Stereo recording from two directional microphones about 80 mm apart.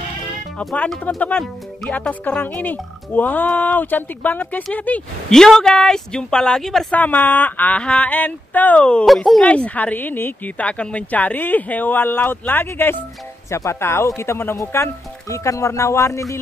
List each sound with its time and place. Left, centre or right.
1.1 s speech: centre
5.3 s speech: centre
6.9 s speech: left
9.0 s speech: centre
9.4 s speech: centre
13.5 s speech: left